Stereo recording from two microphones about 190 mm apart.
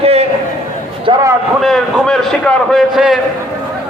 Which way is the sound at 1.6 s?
Centre (ahead or behind).